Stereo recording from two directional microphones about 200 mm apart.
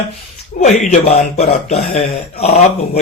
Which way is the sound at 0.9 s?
30° left (ahead or behind).